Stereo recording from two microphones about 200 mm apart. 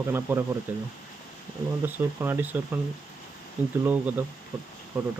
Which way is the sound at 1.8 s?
10° right (ahead or behind).